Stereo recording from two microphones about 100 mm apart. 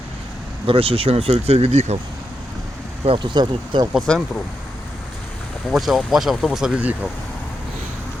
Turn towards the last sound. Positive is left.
turn(degrees=-10)  # may be behind; listen again after turning